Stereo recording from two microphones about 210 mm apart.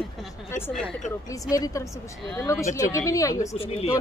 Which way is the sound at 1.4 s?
15° left (ahead or behind).